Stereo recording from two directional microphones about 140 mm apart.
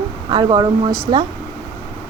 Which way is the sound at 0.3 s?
35° right (ahead or behind).